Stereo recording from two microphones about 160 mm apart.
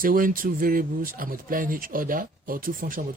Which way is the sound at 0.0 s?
60° right (ahead or behind).